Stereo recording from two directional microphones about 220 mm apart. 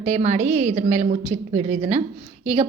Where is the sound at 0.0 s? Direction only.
30° right (ahead or behind).